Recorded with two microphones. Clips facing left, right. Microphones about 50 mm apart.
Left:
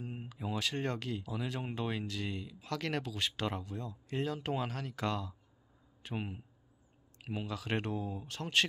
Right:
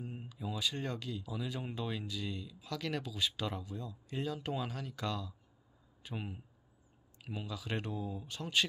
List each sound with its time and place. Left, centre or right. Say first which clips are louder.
0.0 s a sound: left 2 dB; left
0.7 s speech: left 3 dB; left
2.0 s speech: left 1 dB; left
2.3 s speech: left 3 dB; left
6.1 s speech: left 3 dB; left
7.4 s speech: left 3 dB; left